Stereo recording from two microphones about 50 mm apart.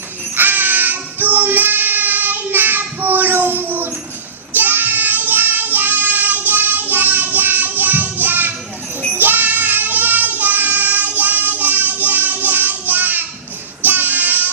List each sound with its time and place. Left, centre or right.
0.3 s child singing: right